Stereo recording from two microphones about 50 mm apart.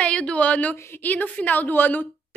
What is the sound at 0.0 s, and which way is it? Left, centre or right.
A woman's voice, left.